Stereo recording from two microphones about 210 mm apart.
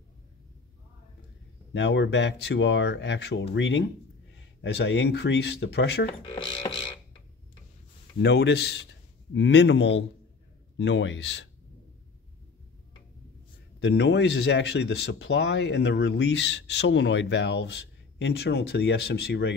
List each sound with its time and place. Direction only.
1.7 s speech: 60° left (ahead or behind)
6.2 s music: 20° left (ahead or behind)
8.2 s speech: 55° left (ahead or behind)
13.7 s speech: 55° left (ahead or behind)